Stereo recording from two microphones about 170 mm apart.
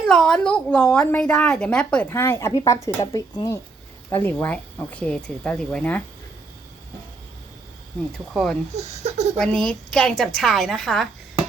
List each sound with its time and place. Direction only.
0.1 s a woman's voice: 5° left (ahead or behind)
8.3 s a woman's voice: centre (ahead or behind)
8.7 s speech: 40° right (ahead or behind)
9.4 s a woman's voice: 5° left (ahead or behind)